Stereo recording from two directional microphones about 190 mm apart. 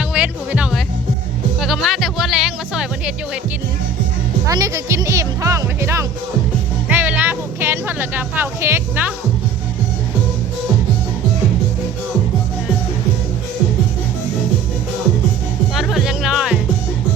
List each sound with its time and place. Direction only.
0.1 s music: 5° right (ahead or behind)
4.4 s speech: 15° right (ahead or behind)
6.8 s music: 10° right (ahead or behind)
15.7 s music: centre (ahead or behind)